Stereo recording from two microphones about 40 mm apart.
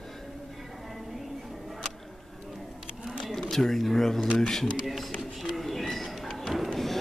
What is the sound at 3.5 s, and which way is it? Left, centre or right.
Speech, centre.